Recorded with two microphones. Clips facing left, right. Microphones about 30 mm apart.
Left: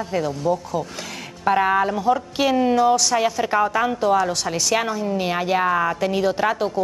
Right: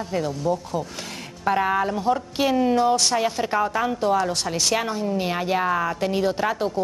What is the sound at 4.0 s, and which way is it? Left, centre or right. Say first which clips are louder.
Speech: left 3 dB; centre.